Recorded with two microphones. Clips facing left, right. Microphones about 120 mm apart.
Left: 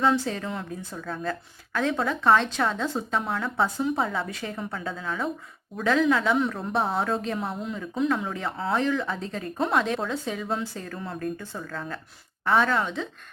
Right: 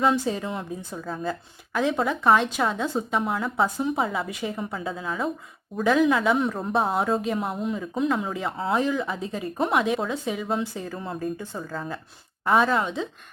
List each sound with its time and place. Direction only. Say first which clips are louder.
0.0 s speech: right 1 dB; 20° right (ahead or behind)
2.2 s a woman's voice: even; 5° right (ahead or behind)
4.3 s a woman's voice: right 3 dB; 15° right (ahead or behind)
6.8 s speech: right 3 dB; 5° right (ahead or behind)
8.0 s a woman's voice: even; 5° right (ahead or behind)
8.6 s a woman's voice: right 1 dB; 15° right (ahead or behind)
12.5 s speech: right 2 dB; 20° right (ahead or behind)